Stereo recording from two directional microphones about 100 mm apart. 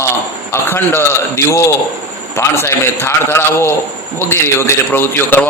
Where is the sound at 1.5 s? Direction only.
30° left (ahead or behind).